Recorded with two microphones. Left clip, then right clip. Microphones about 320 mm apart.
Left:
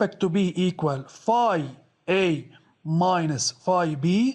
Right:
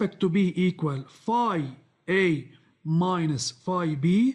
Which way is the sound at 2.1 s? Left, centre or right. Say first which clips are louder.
Left 1 dB; left.